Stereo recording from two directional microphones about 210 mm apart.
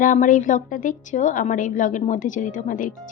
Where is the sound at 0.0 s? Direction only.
40° left (ahead or behind).